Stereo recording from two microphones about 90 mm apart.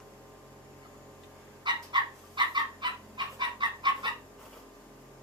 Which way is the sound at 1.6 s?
60° right (ahead or behind).